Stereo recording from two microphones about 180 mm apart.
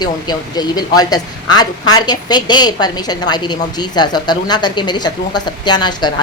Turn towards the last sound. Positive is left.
turn(degrees=25)  # may be behind; listen again after turning